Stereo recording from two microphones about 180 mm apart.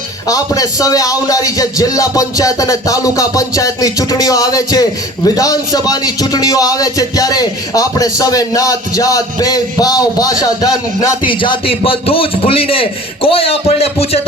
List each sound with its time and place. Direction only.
0.3 s a man's voice: 20° left (ahead or behind)